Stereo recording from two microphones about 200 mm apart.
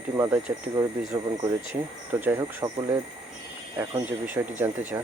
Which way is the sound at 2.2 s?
10° right (ahead or behind).